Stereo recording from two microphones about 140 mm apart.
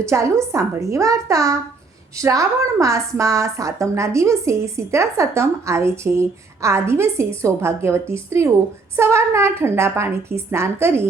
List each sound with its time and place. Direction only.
0.0 s a woman's voice: 20° right (ahead or behind)